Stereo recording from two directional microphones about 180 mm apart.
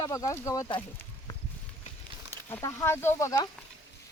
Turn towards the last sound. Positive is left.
turn(degrees=15)  # may be behind; listen again after turning